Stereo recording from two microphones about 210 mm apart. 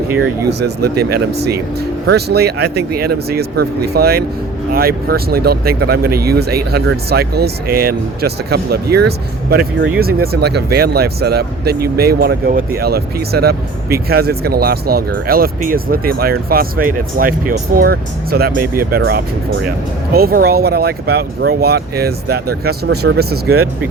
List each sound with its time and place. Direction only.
0.4 s speech: 50° right (ahead or behind)